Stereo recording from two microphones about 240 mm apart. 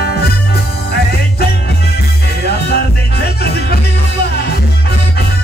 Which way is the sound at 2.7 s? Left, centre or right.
Left.